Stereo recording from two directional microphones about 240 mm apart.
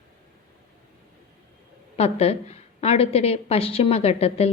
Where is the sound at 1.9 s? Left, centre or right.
Left.